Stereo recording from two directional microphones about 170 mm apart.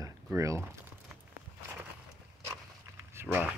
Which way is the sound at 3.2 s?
10° right (ahead or behind).